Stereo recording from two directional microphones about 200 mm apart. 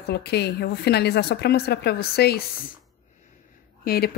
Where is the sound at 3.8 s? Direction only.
50° left (ahead or behind).